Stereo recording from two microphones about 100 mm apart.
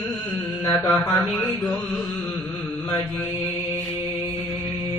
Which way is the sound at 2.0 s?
15° left (ahead or behind).